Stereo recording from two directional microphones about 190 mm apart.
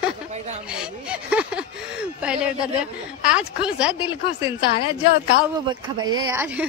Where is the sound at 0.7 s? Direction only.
5° right (ahead or behind).